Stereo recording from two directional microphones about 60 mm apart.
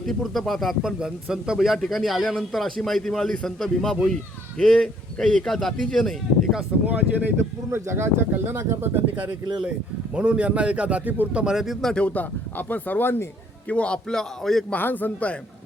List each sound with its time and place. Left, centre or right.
0.0 s a man's voice: centre
5.5 s a man's voice: centre
6.8 s speech: right
7.3 s speech: right
10.2 s speech: right
11.5 s a man's voice: centre
11.9 s speech: centre; by 13.2 s left
13.7 s a man's voice: centre
14.7 s speech: left